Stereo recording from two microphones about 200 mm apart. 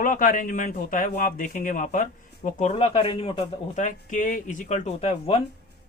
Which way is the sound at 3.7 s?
40° left (ahead or behind).